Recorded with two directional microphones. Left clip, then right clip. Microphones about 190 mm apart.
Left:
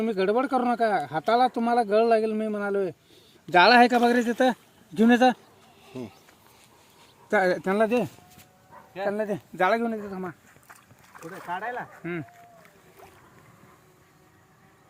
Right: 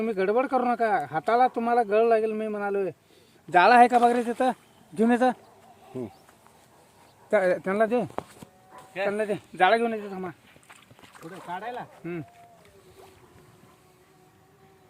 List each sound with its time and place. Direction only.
0.0 s a man's voice: 35° left (ahead or behind)
7.3 s a man's voice: 40° left (ahead or behind)
9.0 s a man's voice: 60° left (ahead or behind)
10.1 s a man's voice: 50° left (ahead or behind)
10.7 s rowboat: centre (ahead or behind)